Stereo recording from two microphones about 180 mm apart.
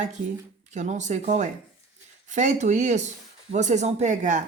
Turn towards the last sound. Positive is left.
turn(degrees=-40)  # may be behind; listen again after turning